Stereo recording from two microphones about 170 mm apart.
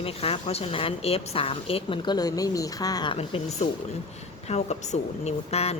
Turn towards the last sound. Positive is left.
turn(degrees=35)  # may be behind; listen again after turning